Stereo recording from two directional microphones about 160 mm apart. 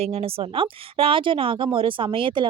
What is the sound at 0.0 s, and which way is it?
Speech, 35° right (ahead or behind).